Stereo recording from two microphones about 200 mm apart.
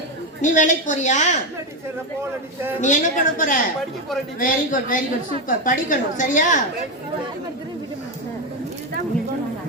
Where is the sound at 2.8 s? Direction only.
40° left (ahead or behind).